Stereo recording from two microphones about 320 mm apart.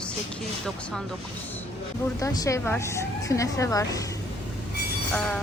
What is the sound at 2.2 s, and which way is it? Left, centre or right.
A woman's voice, centre.